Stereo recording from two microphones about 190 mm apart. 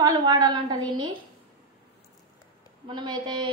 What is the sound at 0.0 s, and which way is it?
A woman's voice, 20° right (ahead or behind).